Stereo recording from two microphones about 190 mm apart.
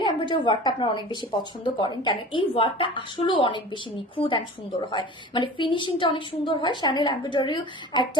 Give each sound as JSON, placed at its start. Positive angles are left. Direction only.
{"t": 0.0, "sound": "a woman's voice", "side_deg": 25}